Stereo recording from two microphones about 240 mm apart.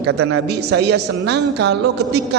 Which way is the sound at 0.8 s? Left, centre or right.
Right.